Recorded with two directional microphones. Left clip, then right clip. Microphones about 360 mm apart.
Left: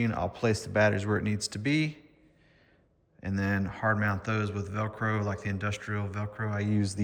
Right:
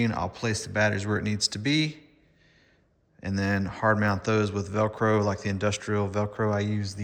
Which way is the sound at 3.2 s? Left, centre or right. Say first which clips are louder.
Right 3 dB; centre.